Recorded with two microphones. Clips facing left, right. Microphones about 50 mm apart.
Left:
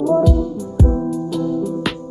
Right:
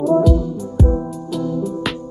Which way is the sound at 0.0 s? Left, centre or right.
Centre.